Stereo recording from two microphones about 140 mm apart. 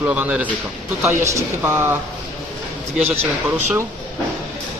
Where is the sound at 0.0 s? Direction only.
10° right (ahead or behind).